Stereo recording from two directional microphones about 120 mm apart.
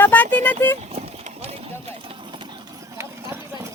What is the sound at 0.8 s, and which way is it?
Clip-clop, 60° right (ahead or behind).